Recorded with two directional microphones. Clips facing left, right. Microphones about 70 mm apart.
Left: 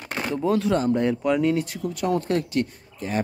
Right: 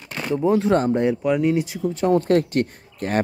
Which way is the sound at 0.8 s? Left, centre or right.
Right.